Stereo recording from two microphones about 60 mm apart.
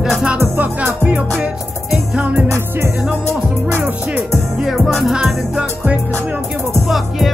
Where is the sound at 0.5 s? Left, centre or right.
Right.